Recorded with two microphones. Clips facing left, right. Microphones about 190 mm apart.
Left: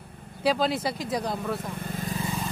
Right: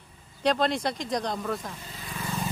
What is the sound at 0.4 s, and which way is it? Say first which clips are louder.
Speech: even; 5° left (ahead or behind).